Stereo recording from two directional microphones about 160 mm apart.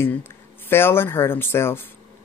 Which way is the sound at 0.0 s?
15° left (ahead or behind).